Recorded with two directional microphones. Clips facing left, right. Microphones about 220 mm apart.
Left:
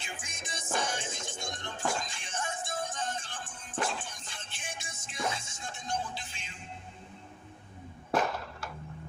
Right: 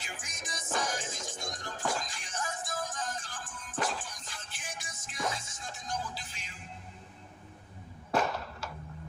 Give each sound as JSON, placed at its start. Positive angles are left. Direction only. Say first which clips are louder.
{"t": 0.0, "sound": "music", "louder": "left 1 dB", "side_deg": 25}